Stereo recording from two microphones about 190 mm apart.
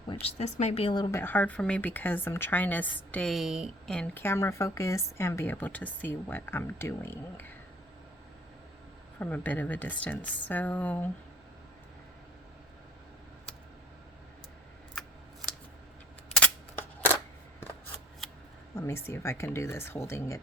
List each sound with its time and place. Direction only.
0.1 s a woman's voice: 30° left (ahead or behind)
1.1 s speech: 10° left (ahead or behind)
9.1 s speech: 10° left (ahead or behind)
16.3 s a sound: 5° left (ahead or behind)
18.7 s speech: 15° left (ahead or behind)